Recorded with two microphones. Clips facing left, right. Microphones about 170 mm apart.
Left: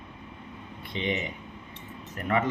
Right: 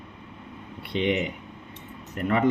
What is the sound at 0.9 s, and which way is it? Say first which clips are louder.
Speech: right 6 dB; 65° right (ahead or behind).